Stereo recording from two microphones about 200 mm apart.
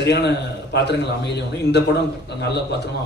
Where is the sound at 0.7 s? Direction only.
60° left (ahead or behind).